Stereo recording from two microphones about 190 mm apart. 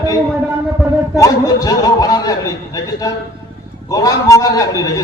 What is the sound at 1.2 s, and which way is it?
A man's voice, 20° left (ahead or behind).